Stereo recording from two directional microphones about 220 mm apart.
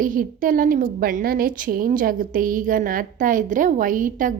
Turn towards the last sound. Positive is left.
turn(degrees=-35)  # may be behind; listen again after turning